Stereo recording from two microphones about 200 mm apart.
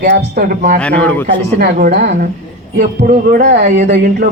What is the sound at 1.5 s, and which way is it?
Speech, 55° right (ahead or behind).